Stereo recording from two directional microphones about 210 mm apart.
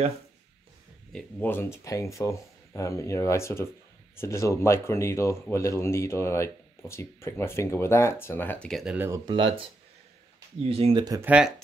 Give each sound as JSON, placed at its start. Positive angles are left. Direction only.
{"t": 1.1, "sound": "speech", "side_deg": 10}
{"t": 9.2, "sound": "speech", "side_deg": -25}
{"t": 10.6, "sound": "speech", "side_deg": -25}
{"t": 11.1, "sound": "speech", "side_deg": -5}